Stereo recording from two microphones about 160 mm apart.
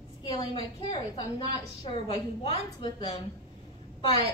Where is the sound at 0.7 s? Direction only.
35° left (ahead or behind).